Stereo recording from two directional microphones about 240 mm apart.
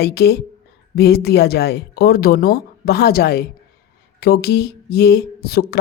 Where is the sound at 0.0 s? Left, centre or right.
Left.